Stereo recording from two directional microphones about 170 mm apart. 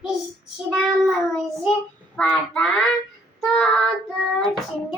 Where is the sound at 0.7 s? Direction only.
Centre (ahead or behind).